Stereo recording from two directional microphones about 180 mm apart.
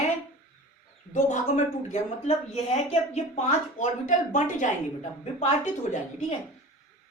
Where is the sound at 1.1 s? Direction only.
40° left (ahead or behind).